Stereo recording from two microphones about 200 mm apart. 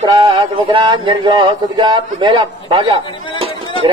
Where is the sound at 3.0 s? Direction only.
25° left (ahead or behind).